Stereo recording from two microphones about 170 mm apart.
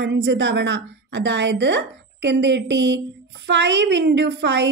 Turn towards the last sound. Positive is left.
turn(degrees=-90)